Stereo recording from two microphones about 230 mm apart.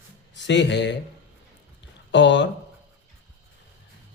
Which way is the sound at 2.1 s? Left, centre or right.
Left.